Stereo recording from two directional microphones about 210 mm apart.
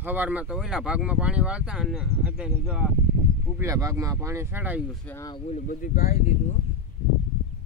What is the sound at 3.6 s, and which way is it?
Speech, 15° right (ahead or behind).